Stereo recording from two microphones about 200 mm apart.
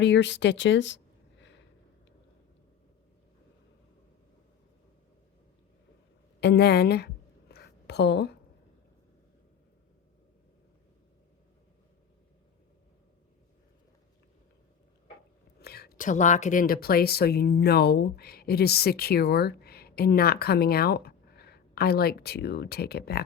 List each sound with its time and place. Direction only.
0.0 s speech: 60° left (ahead or behind)
6.4 s a sound: 55° left (ahead or behind)
15.6 s speech: 50° left (ahead or behind)